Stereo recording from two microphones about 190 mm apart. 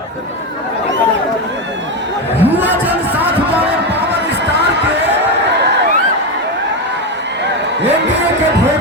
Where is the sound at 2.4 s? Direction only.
10° right (ahead or behind).